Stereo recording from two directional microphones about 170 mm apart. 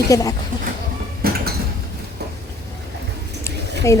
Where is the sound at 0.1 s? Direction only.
20° left (ahead or behind).